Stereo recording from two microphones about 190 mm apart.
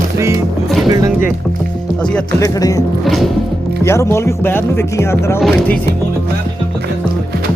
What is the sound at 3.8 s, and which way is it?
Speech, 15° left (ahead or behind).